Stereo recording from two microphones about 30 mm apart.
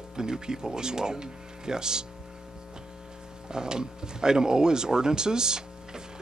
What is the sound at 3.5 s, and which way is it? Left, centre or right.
Speech, right.